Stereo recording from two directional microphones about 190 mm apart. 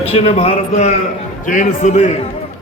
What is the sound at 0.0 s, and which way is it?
A man's voice, 30° left (ahead or behind).